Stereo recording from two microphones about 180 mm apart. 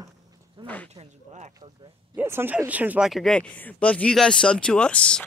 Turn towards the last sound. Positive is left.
turn(degrees=5)  # may be behind; listen again after turning